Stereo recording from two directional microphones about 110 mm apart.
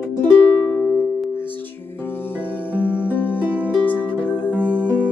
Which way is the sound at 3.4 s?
10° right (ahead or behind).